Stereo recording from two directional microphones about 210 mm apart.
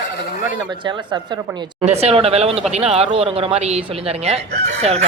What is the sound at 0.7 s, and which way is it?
Speech, 20° right (ahead or behind).